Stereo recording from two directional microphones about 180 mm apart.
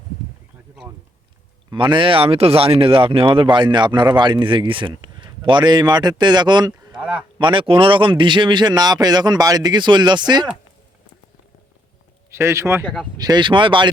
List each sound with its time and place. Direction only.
1.7 s speech: 25° right (ahead or behind)
7.0 s speech: 5° right (ahead or behind)
7.3 s speech: 25° right (ahead or behind)
12.3 s speech: 15° right (ahead or behind)
12.8 s speech: 5° left (ahead or behind)
13.1 s speech: 20° right (ahead or behind)